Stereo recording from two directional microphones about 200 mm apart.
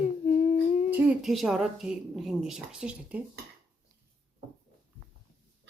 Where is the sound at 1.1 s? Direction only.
Centre (ahead or behind).